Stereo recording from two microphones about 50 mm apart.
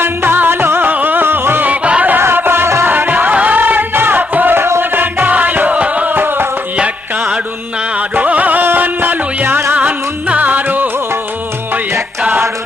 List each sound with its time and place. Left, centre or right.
0.0 s music: right
1.6 s music: right
2.1 s music: right
2.8 s music: right
4.5 s music: right
6.1 s music: right
6.7 s music: centre
7.9 s music: right